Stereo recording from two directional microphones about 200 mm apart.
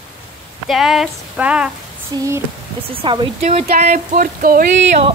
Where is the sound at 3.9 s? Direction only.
45° right (ahead or behind).